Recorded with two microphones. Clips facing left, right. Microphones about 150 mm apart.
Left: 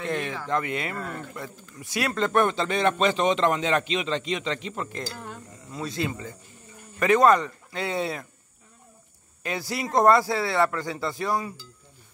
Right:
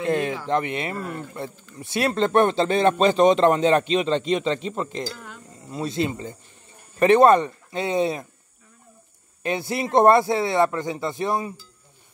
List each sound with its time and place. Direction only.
0.0 s speech: 35° right (ahead or behind)
9.4 s speech: 25° right (ahead or behind)